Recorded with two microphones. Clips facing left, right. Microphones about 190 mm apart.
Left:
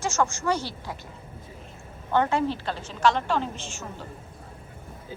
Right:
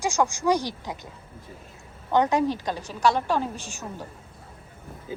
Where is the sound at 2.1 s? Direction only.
15° right (ahead or behind).